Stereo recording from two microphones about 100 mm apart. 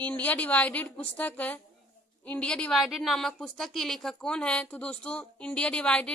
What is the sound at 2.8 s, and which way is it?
Speech, centre (ahead or behind).